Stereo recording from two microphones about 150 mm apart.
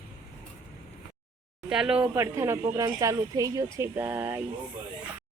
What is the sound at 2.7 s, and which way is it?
Speech, 25° right (ahead or behind).